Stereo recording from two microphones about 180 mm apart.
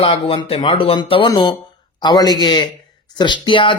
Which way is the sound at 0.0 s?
30° left (ahead or behind).